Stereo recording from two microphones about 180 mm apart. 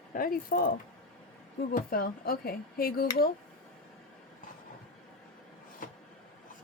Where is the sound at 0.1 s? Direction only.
50° left (ahead or behind).